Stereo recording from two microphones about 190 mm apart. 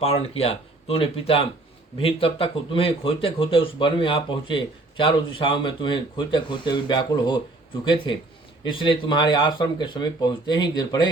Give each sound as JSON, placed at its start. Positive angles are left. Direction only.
{"t": 0.0, "sound": "speech", "side_deg": 30}
{"t": 8.6, "sound": "speech", "side_deg": 25}